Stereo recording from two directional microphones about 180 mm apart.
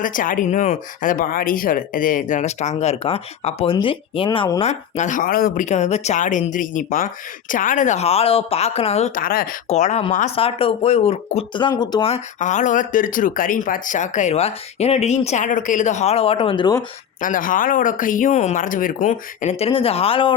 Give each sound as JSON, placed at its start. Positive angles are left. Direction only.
{"t": 0.0, "sound": "speech", "side_deg": 50}
{"t": 4.6, "sound": "speech", "side_deg": 40}
{"t": 9.6, "sound": "speech", "side_deg": 40}
{"t": 17.2, "sound": "speech", "side_deg": 45}